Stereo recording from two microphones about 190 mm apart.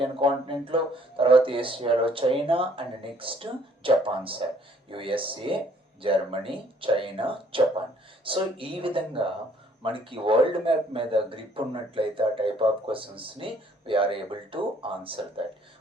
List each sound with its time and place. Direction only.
0.0 s speech: 30° right (ahead or behind)